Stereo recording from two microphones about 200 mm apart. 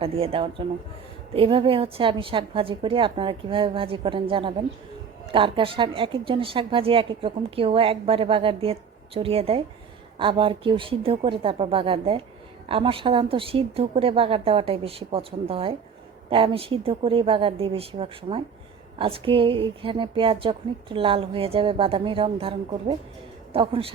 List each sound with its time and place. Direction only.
0.0 s a woman's voice: 30° right (ahead or behind)